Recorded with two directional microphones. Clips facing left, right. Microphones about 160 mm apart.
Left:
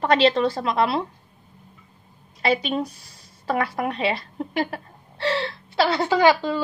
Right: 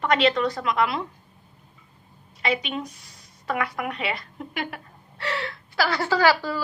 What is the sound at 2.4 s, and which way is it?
Speech, 35° left (ahead or behind).